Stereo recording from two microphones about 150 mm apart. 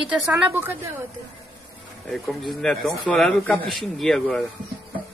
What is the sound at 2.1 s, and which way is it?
Speech, centre (ahead or behind).